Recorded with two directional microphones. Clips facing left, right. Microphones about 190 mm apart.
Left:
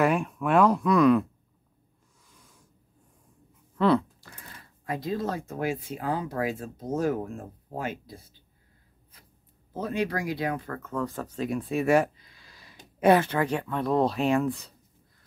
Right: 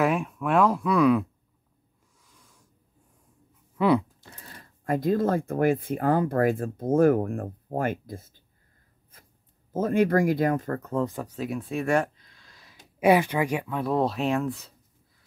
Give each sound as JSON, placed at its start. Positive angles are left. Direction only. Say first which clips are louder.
{"t": 0.0, "sound": "speech", "louder": "even", "side_deg": 0}
{"t": 2.2, "sound": "a sound", "louder": "left 1 dB", "side_deg": 0}
{"t": 3.7, "sound": "speech", "louder": "right 1 dB", "side_deg": -10}
{"t": 4.2, "sound": "a sound", "louder": "right 1 dB", "side_deg": -25}
{"t": 4.6, "sound": "speech", "louder": "right 6 dB", "side_deg": -50}
{"t": 9.1, "sound": "writing", "louder": "right 2 dB", "side_deg": -50}
{"t": 9.7, "sound": "speech", "louder": "right 7 dB", "side_deg": -45}
{"t": 11.0, "sound": "speech", "louder": "even", "side_deg": -15}
{"t": 13.0, "sound": "speech", "louder": "even", "side_deg": -10}